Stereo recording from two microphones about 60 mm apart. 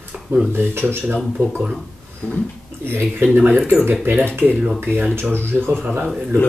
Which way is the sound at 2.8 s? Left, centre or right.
Right.